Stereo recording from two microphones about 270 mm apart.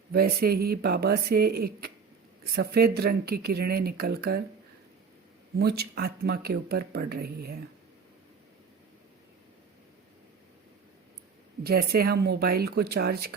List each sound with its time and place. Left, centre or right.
0.1 s speech: right
5.5 s speech: right
11.6 s speech: right